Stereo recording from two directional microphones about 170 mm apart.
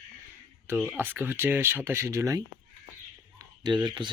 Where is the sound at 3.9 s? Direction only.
25° right (ahead or behind).